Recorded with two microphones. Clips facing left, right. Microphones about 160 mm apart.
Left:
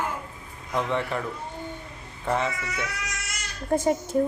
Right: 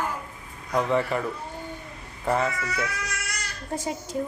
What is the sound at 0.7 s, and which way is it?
Speech, centre (ahead or behind).